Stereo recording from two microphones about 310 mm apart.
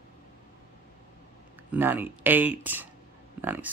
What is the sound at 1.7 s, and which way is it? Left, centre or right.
Speech, centre.